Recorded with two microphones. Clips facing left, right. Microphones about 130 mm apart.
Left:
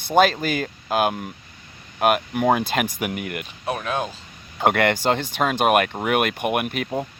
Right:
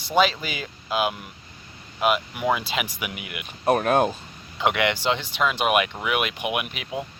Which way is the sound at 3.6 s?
50° right (ahead or behind).